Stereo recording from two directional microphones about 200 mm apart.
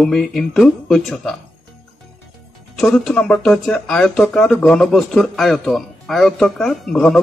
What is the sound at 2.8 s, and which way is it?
Speech, centre (ahead or behind).